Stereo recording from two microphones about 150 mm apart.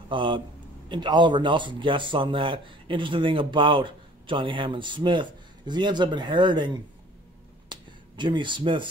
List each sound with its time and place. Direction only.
0.1 s speech: 30° right (ahead or behind)
7.7 s finger snapping: 30° right (ahead or behind)